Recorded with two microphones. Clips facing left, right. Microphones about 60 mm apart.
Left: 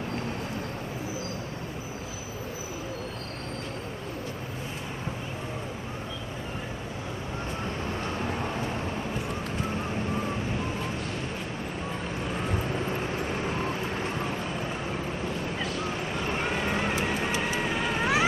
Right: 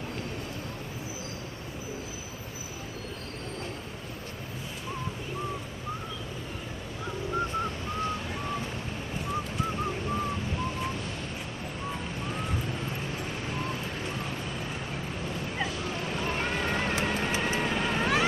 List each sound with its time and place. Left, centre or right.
16.1 s vehicle: centre